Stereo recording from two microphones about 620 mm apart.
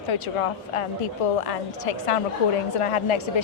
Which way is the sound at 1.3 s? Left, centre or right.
Left.